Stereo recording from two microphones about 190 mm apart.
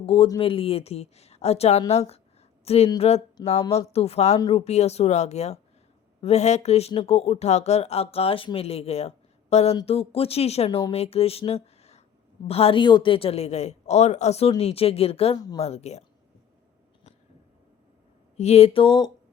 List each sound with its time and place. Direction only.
0.0 s speech: 30° left (ahead or behind)
18.3 s speech: 35° left (ahead or behind)